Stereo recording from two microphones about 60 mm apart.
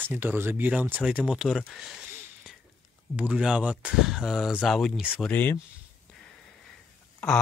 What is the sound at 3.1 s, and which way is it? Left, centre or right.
Speech, centre.